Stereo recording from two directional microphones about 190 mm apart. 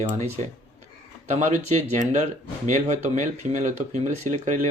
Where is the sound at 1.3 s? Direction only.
40° right (ahead or behind).